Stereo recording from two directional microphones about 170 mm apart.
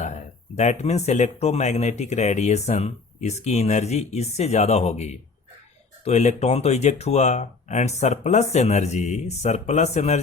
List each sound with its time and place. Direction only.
0.0 s speech: 45° left (ahead or behind)